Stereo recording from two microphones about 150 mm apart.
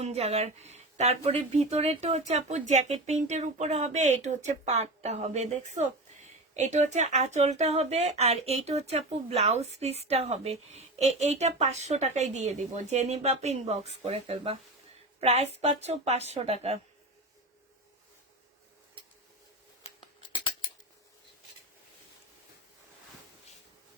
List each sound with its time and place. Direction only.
0.0 s speech: 45° right (ahead or behind)